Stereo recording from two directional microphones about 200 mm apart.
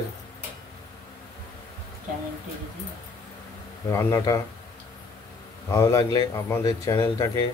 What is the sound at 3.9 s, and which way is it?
Speech, 15° left (ahead or behind).